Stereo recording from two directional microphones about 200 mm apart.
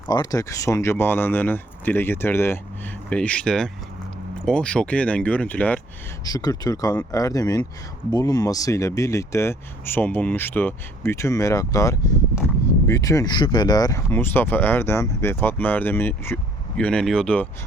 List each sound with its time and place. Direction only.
0.1 s speech: 20° left (ahead or behind)
6.2 s speech: 20° left (ahead or behind)